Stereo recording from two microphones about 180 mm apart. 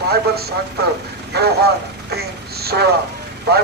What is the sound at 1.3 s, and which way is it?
Speech, 60° right (ahead or behind).